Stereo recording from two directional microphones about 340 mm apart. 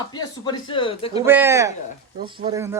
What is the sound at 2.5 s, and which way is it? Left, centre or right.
Speech, centre.